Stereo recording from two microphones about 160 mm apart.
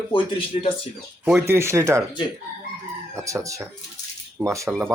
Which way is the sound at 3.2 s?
20° right (ahead or behind).